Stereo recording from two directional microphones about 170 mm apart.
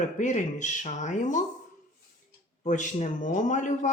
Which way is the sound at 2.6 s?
45° left (ahead or behind).